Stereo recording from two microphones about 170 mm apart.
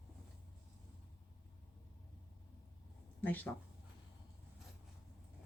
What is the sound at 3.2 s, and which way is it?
Speech, 10° left (ahead or behind).